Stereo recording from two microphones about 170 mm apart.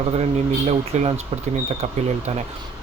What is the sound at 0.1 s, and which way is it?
Speech, 40° right (ahead or behind).